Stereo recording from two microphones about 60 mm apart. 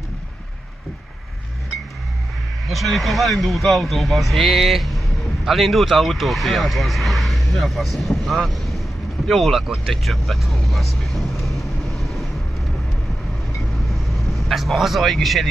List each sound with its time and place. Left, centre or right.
2.7 s speech: centre
13.8 s vehicle: centre